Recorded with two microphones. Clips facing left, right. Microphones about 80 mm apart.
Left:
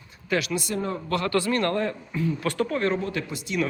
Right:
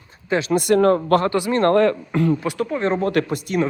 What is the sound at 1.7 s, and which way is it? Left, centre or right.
Speech, right.